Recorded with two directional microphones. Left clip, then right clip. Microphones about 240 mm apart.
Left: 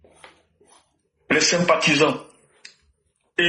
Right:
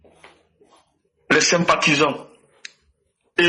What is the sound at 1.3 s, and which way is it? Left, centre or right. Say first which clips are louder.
Speech: right 2 dB; right.